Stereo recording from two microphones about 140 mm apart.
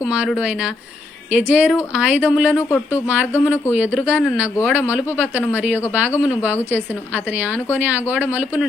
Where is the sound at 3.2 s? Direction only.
15° left (ahead or behind).